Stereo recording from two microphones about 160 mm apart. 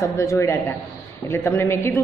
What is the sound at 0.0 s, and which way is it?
A woman's voice, 15° left (ahead or behind).